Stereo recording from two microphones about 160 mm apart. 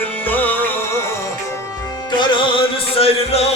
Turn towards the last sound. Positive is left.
turn(degrees=40)  # may be behind; listen again after turning